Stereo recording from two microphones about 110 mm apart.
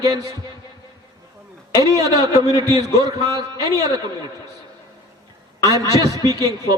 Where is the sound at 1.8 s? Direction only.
30° right (ahead or behind).